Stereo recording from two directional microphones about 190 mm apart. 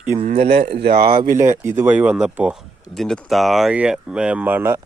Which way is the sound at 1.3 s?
15° right (ahead or behind).